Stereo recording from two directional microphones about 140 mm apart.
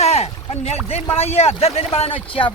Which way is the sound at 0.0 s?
50° left (ahead or behind).